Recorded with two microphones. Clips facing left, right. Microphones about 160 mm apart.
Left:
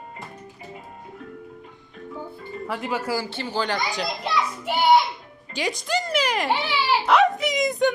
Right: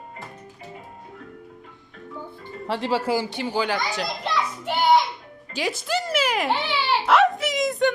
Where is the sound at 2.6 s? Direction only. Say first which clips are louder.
Right 4 dB; 30° right (ahead or behind); by 4.1 s 5° right (ahead or behind).